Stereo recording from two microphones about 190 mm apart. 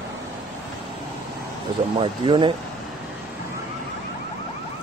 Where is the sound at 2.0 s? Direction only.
25° right (ahead or behind).